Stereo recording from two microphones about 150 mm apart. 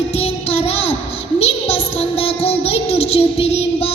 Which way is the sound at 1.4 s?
40° left (ahead or behind).